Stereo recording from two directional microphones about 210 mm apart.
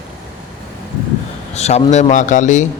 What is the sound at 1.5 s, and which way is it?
A man's voice, 30° left (ahead or behind).